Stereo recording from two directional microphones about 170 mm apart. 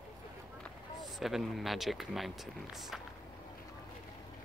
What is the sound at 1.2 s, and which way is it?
Speech, centre (ahead or behind).